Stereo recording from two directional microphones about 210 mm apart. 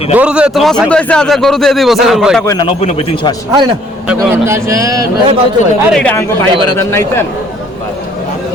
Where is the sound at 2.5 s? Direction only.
20° left (ahead or behind).